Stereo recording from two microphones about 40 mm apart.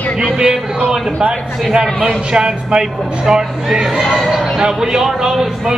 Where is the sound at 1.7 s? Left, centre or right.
Centre.